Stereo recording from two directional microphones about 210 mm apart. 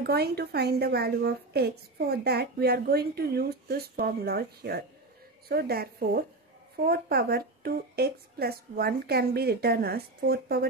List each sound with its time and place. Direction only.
0.0 s a woman's voice: 50° right (ahead or behind)